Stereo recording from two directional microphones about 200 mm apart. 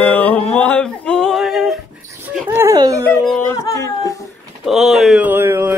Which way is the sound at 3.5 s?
15° left (ahead or behind).